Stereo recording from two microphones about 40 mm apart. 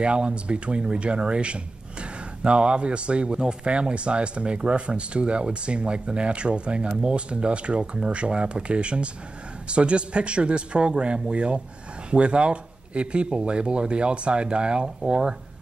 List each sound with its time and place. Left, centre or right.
0.0 s speech: right